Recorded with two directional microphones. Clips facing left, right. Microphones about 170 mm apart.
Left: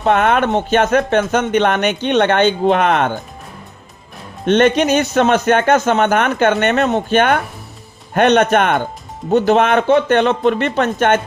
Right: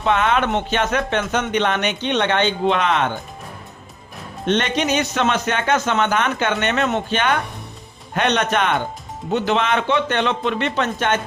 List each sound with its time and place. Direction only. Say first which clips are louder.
0.0 s speech: left 4 dB; 50° left (ahead or behind)
4.4 s speech: left 7 dB; 50° left (ahead or behind)